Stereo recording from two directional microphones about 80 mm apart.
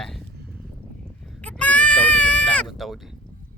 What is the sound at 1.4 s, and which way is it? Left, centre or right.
Sheep, centre.